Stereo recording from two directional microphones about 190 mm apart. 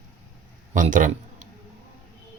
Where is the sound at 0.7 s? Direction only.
45° right (ahead or behind).